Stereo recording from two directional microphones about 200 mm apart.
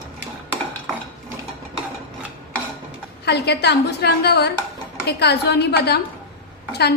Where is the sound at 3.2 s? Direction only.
55° left (ahead or behind).